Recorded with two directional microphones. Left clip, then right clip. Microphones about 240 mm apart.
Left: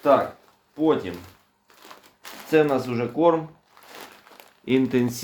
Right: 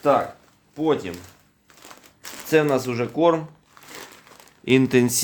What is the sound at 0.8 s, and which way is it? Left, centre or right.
Speech, right.